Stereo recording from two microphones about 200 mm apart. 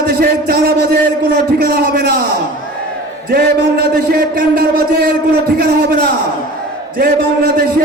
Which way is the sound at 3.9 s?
50° right (ahead or behind).